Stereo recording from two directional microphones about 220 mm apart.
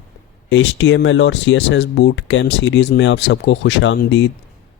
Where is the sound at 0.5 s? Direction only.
55° left (ahead or behind).